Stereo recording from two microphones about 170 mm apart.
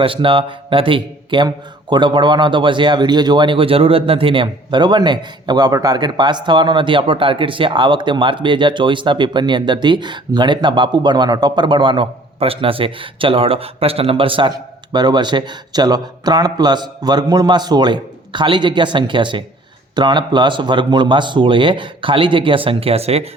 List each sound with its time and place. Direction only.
0.0 s a man's voice: 30° right (ahead or behind)